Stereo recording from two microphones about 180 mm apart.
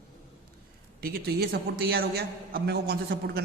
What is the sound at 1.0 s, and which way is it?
A man's voice, 60° right (ahead or behind).